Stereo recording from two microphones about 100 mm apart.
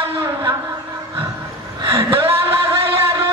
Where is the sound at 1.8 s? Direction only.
60° right (ahead or behind).